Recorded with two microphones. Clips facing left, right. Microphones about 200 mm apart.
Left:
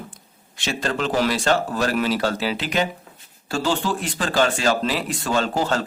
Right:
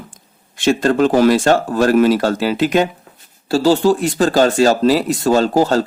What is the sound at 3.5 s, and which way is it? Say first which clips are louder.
Speech: right 10 dB; 35° right (ahead or behind).